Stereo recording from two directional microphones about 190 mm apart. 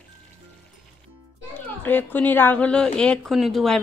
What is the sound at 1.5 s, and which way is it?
A woman's voice, 10° left (ahead or behind).